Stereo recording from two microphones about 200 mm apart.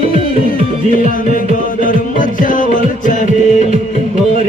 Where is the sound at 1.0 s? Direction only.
40° left (ahead or behind).